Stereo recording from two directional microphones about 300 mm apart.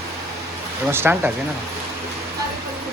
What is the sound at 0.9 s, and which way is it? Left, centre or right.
Speech, centre.